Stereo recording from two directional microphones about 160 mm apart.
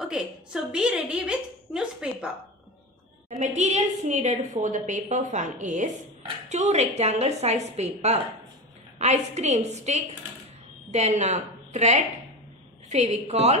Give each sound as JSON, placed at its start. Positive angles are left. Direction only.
{"t": 0.1, "sound": "a woman's voice", "side_deg": -5}
{"t": 3.3, "sound": "a woman's voice", "side_deg": -45}